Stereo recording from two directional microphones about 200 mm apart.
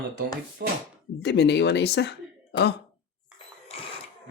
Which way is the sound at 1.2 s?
60° left (ahead or behind).